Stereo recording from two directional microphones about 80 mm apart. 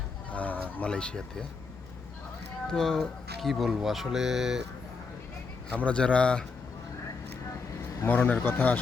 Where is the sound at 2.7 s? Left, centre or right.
Centre.